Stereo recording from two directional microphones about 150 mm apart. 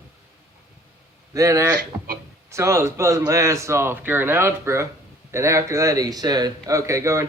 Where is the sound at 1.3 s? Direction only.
20° right (ahead or behind).